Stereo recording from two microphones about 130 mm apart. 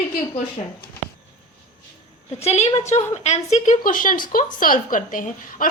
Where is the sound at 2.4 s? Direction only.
55° left (ahead or behind).